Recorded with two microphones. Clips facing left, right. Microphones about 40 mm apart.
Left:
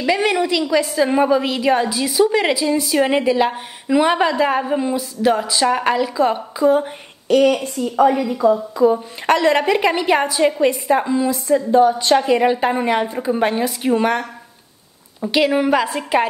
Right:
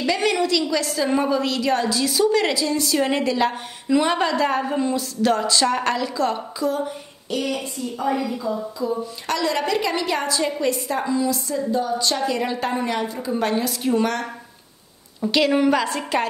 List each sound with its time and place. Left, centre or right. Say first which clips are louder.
0.0 s a woman's voice: left 3 dB; centre
7.2 s a woman's voice: left 11 dB; left
8.1 s a woman's voice: left 4 dB; left
8.4 s a woman's voice: left 11 dB; left
9.2 s a woman's voice: left 9 dB; left
15.2 s a woman's voice: left 2 dB; centre